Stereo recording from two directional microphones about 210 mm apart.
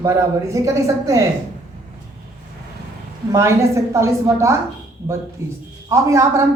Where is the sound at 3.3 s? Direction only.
15° right (ahead or behind).